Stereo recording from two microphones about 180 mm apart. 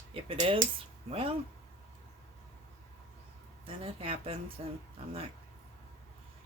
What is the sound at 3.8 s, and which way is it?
Speech, 30° right (ahead or behind).